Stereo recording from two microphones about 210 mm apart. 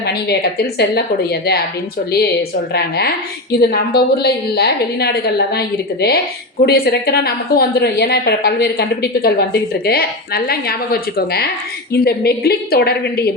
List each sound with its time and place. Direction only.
0.0 s a woman's voice: 50° left (ahead or behind)
2.7 s a woman's voice: 50° left (ahead or behind)
11.9 s a woman's voice: 50° left (ahead or behind)